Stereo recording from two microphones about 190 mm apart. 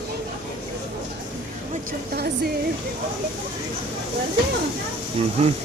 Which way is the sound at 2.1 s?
55° right (ahead or behind).